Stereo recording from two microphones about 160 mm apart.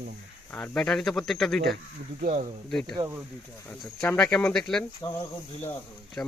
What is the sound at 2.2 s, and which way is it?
Speech, 55° right (ahead or behind).